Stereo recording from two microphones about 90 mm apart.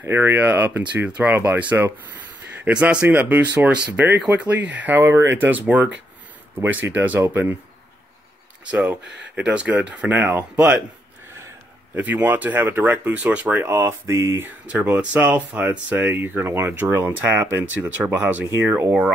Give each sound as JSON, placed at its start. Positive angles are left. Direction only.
{"t": 0.0, "sound": "speech", "side_deg": -25}
{"t": 8.6, "sound": "speech", "side_deg": -10}
{"t": 11.9, "sound": "speech", "side_deg": -20}
{"t": 13.7, "sound": "speech", "side_deg": -30}
{"t": 15.1, "sound": "speech", "side_deg": -20}